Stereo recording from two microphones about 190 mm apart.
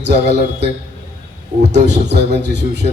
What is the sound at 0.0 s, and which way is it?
Speech, 60° right (ahead or behind).